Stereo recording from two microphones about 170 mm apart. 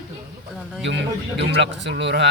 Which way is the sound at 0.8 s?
90° right.